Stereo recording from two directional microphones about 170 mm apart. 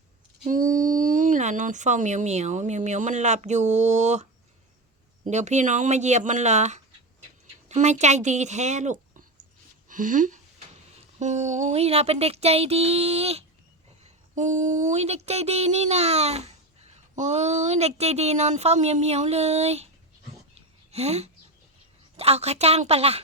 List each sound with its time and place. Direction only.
0.4 s speech: 50° right (ahead or behind)
5.3 s speech: 45° right (ahead or behind)
11.2 s mantra: 45° right (ahead or behind)
20.9 s mantra: 40° right (ahead or behind)